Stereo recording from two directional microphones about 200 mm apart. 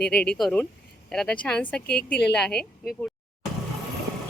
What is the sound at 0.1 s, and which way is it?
Speech, 5° left (ahead or behind).